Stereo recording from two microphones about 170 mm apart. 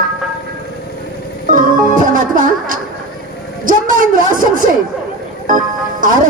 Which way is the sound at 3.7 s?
50° right (ahead or behind).